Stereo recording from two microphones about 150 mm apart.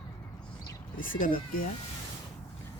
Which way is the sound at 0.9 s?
65° left (ahead or behind).